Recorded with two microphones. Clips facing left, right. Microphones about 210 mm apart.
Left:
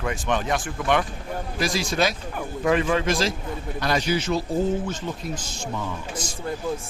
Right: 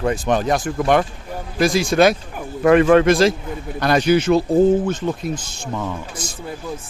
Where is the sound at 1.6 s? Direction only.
55° right (ahead or behind).